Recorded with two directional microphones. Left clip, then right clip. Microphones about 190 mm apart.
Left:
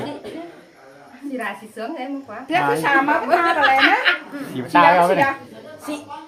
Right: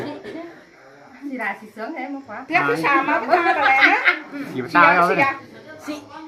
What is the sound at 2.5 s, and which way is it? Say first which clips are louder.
Speech: even; 20° left (ahead or behind).